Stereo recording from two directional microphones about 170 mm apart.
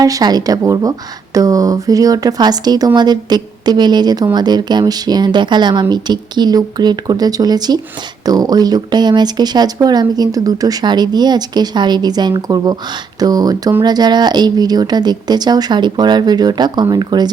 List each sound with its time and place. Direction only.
0.0 s speech: 20° right (ahead or behind)